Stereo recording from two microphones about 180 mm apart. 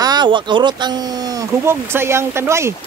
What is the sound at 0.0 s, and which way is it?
Speech, 25° right (ahead or behind).